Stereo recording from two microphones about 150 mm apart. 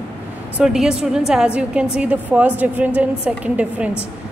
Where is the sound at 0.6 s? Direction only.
5° right (ahead or behind).